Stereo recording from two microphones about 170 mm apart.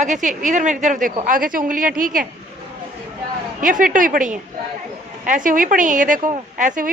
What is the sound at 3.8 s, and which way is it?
Speech, 50° right (ahead or behind).